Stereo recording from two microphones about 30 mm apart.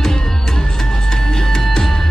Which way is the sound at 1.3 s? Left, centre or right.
Centre.